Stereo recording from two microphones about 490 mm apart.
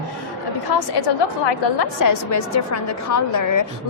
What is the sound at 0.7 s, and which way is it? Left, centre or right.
A woman's voice, left.